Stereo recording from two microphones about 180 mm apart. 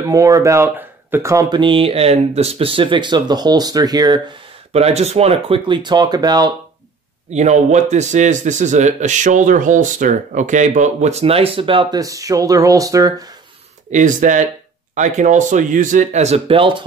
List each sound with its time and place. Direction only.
0.1 s speech: 20° right (ahead or behind)
4.7 s speech: 35° right (ahead or behind)
7.2 s a man's voice: 40° right (ahead or behind); by 13.1 s 20° right (ahead or behind)
13.8 s speech: 45° right (ahead or behind)